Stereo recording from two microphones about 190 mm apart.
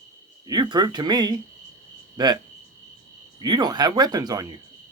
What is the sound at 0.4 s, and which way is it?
Speech, 25° right (ahead or behind).